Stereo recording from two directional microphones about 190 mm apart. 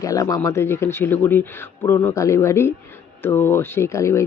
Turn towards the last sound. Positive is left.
turn(degrees=15)  # may be behind; listen again after turning